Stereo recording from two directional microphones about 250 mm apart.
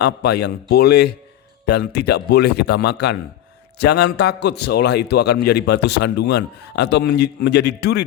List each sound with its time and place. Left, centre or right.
0.0 s a man's voice: left